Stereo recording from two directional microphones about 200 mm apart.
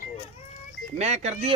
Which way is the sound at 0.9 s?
35° right (ahead or behind).